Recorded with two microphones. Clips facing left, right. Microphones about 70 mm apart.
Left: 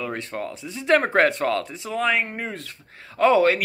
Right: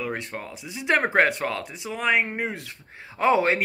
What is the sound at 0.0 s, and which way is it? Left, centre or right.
Speech, centre.